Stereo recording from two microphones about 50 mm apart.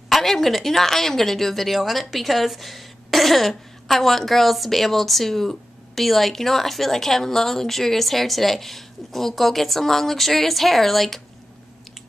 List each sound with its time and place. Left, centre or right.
0.1 s speech: centre